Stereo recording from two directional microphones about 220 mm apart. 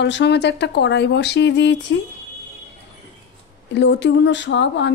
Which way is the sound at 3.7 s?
55° left (ahead or behind).